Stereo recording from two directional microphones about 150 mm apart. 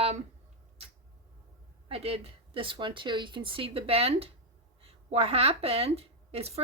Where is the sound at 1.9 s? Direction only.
40° right (ahead or behind).